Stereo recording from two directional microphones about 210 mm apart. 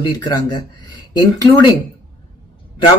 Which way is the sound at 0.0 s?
20° left (ahead or behind).